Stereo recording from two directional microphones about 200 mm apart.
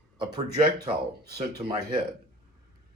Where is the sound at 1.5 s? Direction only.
20° right (ahead or behind).